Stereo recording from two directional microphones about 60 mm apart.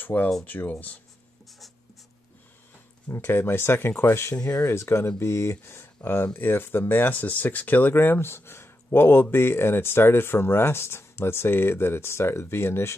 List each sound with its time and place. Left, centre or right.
0.0 s speech: left
3.1 s speech: left